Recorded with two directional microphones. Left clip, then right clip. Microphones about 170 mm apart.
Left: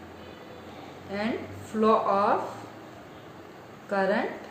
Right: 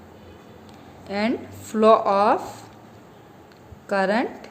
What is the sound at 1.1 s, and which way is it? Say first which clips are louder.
A woman's voice: right 6 dB; 90° right.